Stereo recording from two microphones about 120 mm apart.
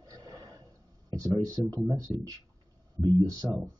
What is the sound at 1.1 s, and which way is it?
Speech, 30° right (ahead or behind).